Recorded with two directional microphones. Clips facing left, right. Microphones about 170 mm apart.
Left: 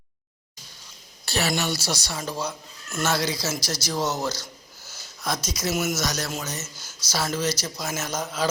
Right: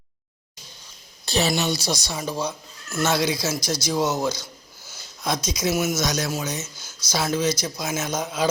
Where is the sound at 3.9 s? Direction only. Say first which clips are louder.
Right 3 dB; 10° right (ahead or behind).